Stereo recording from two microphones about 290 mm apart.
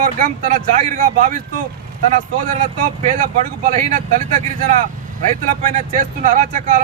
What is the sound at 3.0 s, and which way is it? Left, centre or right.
A man's voice, right.